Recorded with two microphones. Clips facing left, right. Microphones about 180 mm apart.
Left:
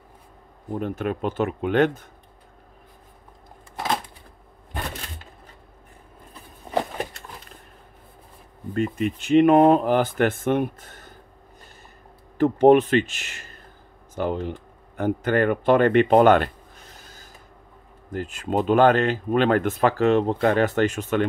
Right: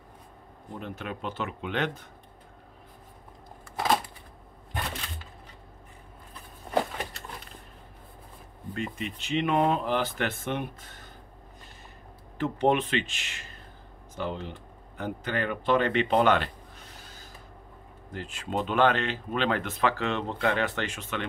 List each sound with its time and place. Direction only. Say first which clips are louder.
0.7 s speech: left 10 dB; 50° left (ahead or behind)
3.7 s a sound: even; centre (ahead or behind)
8.7 s speech: left 10 dB; 50° left (ahead or behind)
12.4 s speech: left 10 dB; 40° left (ahead or behind)
18.1 s speech: left 7 dB; 45° left (ahead or behind)